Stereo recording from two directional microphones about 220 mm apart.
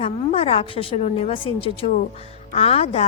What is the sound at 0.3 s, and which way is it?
A woman's voice, 25° left (ahead or behind).